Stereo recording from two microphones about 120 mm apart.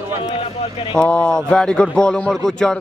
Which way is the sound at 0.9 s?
10° left (ahead or behind).